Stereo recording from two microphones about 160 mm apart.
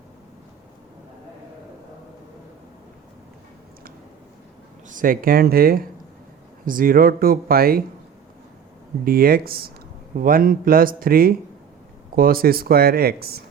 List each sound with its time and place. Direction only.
4.9 s speech: 60° right (ahead or behind)
9.0 s speech: 65° right (ahead or behind)